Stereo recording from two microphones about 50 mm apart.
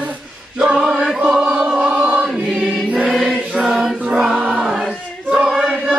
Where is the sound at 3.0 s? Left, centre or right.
Centre.